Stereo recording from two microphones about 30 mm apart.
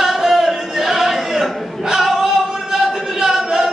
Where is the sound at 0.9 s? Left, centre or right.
Centre.